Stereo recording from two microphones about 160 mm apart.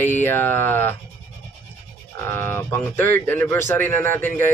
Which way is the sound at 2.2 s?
15° left (ahead or behind).